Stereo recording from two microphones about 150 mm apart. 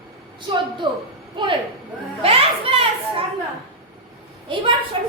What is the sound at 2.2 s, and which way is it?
Children playing, 40° right (ahead or behind).